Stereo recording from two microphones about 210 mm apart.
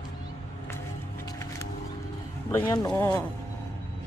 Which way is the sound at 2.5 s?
15° left (ahead or behind).